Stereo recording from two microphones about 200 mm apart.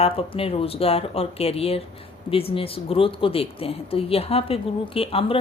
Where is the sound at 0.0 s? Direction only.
30° left (ahead or behind).